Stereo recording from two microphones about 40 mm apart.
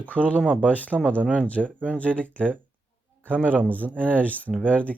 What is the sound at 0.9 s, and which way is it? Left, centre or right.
Speech, left.